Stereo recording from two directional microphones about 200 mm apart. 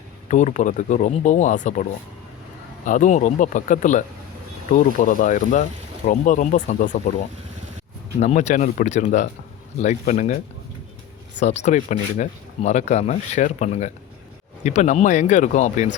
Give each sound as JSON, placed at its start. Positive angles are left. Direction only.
{"t": 0.3, "sound": "speech", "side_deg": 40}
{"t": 2.8, "sound": "speech", "side_deg": 40}
{"t": 8.2, "sound": "speech", "side_deg": 35}